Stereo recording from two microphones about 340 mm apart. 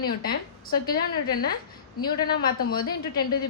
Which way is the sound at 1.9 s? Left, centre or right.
Left.